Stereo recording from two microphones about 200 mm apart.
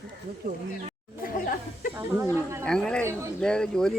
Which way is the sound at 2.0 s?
10° right (ahead or behind).